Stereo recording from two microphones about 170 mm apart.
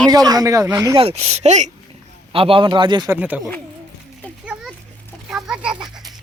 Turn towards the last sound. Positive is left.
turn(degrees=-5)  # may be behind; listen again after turning